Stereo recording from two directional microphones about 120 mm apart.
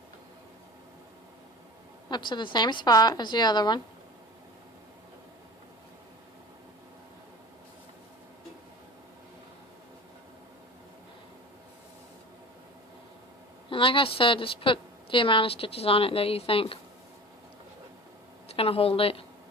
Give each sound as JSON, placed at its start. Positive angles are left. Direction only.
{"t": 2.0, "sound": "a woman's voice", "side_deg": 40}
{"t": 13.7, "sound": "a woman's voice", "side_deg": 45}
{"t": 18.4, "sound": "speech", "side_deg": 55}